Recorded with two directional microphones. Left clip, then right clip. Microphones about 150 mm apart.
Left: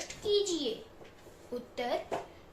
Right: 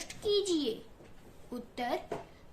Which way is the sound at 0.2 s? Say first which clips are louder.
Even; 45° right (ahead or behind).